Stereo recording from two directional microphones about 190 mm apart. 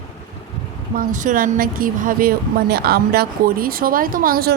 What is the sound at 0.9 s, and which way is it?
A woman's voice, 45° right (ahead or behind).